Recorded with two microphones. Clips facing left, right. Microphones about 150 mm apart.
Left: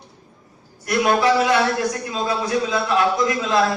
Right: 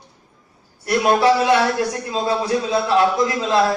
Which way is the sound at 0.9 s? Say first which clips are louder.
Right 2 dB; 30° right (ahead or behind).